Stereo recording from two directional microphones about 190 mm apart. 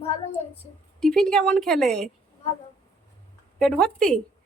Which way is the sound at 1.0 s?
5° left (ahead or behind).